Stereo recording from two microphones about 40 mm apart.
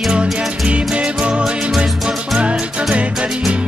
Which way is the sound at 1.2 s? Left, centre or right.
Right.